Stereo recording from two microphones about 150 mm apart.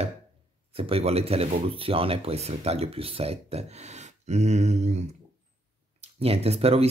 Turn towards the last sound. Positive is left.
turn(degrees=-45)  # may be behind; listen again after turning